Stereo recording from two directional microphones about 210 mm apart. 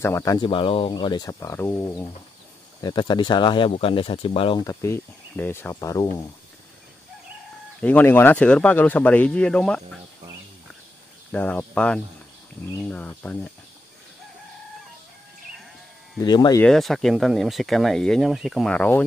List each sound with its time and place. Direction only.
0.0 s speech: 15° left (ahead or behind)
7.8 s speech: 10° left (ahead or behind)
11.3 s speech: 10° left (ahead or behind)
16.2 s speech: 20° left (ahead or behind)
16.6 s speech: centre (ahead or behind)